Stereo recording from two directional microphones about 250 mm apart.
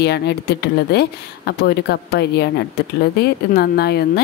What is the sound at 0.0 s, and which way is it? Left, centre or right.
Speech, left.